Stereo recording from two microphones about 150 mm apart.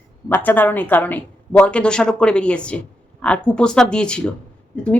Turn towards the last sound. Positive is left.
turn(degrees=10)  # may be behind; listen again after turning